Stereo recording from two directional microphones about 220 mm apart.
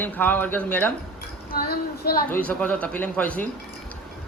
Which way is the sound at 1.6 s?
45° left (ahead or behind).